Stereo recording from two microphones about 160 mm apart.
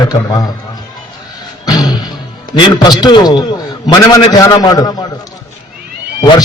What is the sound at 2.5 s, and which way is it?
A man's voice, 25° left (ahead or behind).